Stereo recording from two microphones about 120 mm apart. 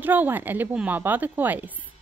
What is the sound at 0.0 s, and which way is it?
A woman's voice, 15° right (ahead or behind).